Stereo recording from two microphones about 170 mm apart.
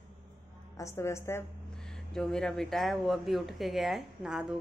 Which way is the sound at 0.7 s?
15° left (ahead or behind).